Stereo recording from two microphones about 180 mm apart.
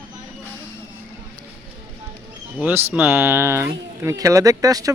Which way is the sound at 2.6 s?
10° right (ahead or behind).